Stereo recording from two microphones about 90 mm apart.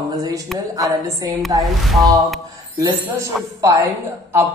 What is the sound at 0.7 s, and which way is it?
Speech, 40° right (ahead or behind).